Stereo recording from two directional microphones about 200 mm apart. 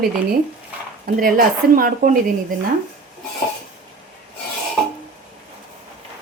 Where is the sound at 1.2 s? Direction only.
45° right (ahead or behind).